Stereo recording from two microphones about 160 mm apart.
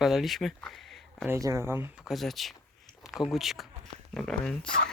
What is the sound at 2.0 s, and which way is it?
Speech, centre (ahead or behind).